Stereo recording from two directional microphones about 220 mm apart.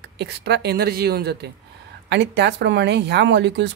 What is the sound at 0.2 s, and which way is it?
Speech, 50° right (ahead or behind).